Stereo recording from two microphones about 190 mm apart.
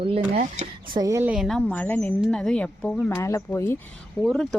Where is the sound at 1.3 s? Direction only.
Centre (ahead or behind).